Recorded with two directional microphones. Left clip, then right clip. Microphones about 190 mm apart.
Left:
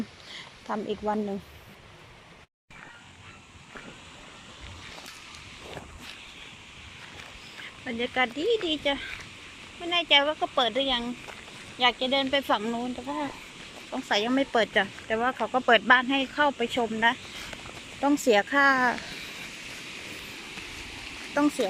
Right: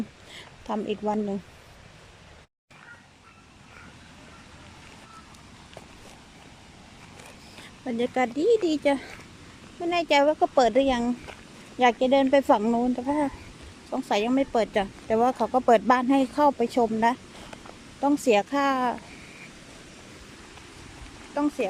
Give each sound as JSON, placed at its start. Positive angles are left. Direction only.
{"t": 0.3, "sound": "speech", "side_deg": -15}
{"t": 7.9, "sound": "speech", "side_deg": -25}
{"t": 15.9, "sound": "speech", "side_deg": -25}
{"t": 18.3, "sound": "speech", "side_deg": -15}
{"t": 21.3, "sound": "speech", "side_deg": -5}